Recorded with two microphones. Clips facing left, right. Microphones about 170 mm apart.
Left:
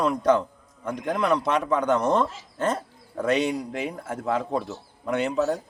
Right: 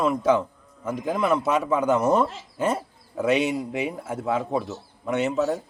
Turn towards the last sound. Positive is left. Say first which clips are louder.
# right 1 dB
turn(degrees=0)  # may be behind; listen again after turning